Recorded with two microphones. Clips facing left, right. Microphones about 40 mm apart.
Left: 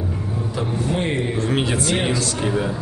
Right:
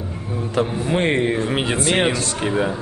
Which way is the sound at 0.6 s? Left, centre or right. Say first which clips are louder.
Right 4 dB; right.